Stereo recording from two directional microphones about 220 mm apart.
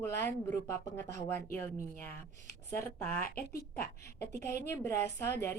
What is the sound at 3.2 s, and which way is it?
Speech, 45° left (ahead or behind).